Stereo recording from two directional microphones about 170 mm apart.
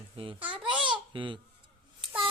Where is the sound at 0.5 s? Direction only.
30° right (ahead or behind).